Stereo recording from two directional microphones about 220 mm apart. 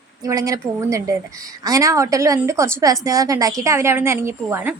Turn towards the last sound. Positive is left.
turn(degrees=-10)  # may be behind; listen again after turning